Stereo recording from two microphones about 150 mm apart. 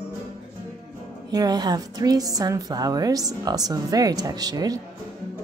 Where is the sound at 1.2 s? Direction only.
25° right (ahead or behind).